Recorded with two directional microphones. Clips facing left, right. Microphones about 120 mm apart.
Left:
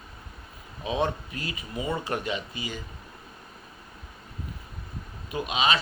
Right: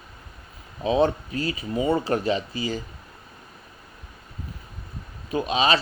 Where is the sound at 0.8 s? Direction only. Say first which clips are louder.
Right 7 dB; 30° right (ahead or behind).